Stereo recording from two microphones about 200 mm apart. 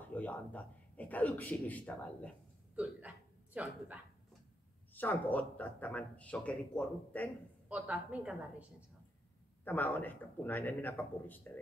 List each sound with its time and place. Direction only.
0.0 s a man's voice: 10° left (ahead or behind)
2.7 s a woman's voice: 5° right (ahead or behind)
4.9 s speech: 10° left (ahead or behind)
7.6 s a woman's voice: 5° right (ahead or behind)
9.7 s speech: 10° left (ahead or behind)